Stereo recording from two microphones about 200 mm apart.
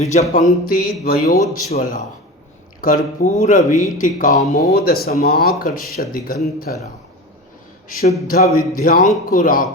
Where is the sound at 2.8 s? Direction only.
40° left (ahead or behind).